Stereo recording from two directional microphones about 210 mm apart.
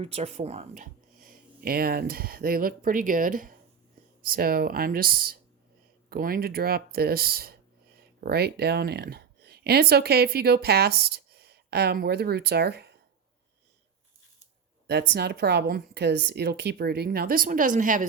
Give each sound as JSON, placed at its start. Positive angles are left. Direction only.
{"t": 0.0, "sound": "a woman's voice", "side_deg": -30}
{"t": 14.8, "sound": "a woman's voice", "side_deg": -50}